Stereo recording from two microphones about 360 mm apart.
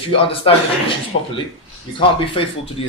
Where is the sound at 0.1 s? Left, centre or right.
Centre.